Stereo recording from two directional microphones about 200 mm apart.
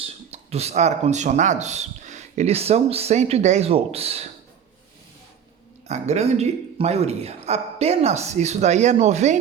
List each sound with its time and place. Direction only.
0.0 s speech: 30° right (ahead or behind)
5.9 s speech: 35° right (ahead or behind)